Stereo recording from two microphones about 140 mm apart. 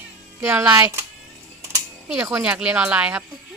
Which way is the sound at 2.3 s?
5° right (ahead or behind).